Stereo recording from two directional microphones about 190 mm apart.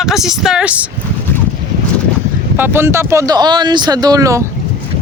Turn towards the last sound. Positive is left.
turn(degrees=-15)  # may be behind; listen again after turning